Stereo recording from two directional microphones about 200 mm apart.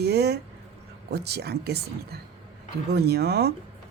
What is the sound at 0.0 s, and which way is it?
Speech, 55° right (ahead or behind).